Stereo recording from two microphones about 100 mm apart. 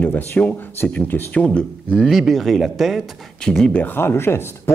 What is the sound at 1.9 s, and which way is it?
Speech, centre (ahead or behind).